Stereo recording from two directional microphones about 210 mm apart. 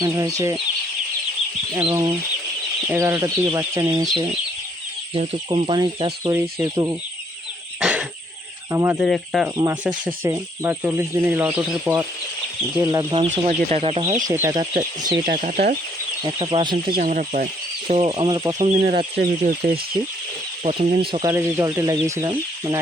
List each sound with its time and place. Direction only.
0.0 s speech: 15° right (ahead or behind)
1.9 s speech: 20° right (ahead or behind)
7.8 s cough: 5° right (ahead or behind)
8.7 s speech: 15° right (ahead or behind)
9.0 s speech: centre (ahead or behind)
9.6 s speech: 15° right (ahead or behind)
13.3 s speech: 35° right (ahead or behind)
14.3 s speech: 15° right (ahead or behind)
14.6 s speech: 35° right (ahead or behind)
16.2 s speech: 25° right (ahead or behind)
16.9 s speech: 40° right (ahead or behind)
17.8 s speech: 25° right (ahead or behind)
19.1 s speech: 45° right (ahead or behind)
20.7 s speech: 25° right (ahead or behind)